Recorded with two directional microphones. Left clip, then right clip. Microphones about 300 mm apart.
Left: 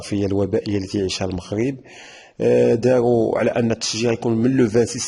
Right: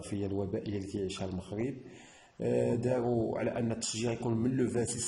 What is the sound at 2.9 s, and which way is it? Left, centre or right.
Speech, left.